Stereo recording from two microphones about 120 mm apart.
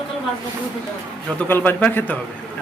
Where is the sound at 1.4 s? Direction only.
15° left (ahead or behind).